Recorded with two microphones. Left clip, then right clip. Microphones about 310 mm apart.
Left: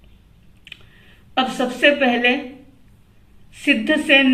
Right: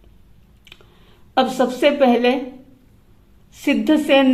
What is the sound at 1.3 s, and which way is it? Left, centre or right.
Speech, right.